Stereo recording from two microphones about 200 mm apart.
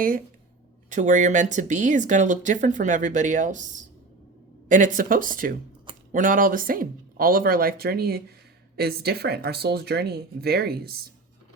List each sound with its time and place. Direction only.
0.9 s speech: 40° right (ahead or behind)